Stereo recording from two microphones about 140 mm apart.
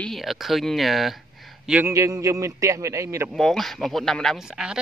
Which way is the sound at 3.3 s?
Centre (ahead or behind).